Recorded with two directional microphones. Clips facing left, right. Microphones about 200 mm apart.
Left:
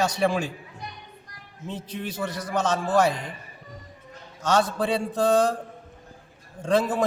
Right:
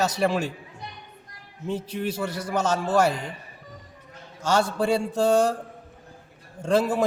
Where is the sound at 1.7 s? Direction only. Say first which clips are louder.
Right 5 dB; 10° right (ahead or behind).